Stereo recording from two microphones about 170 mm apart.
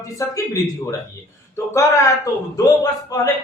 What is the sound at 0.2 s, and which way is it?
Speech, 20° left (ahead or behind).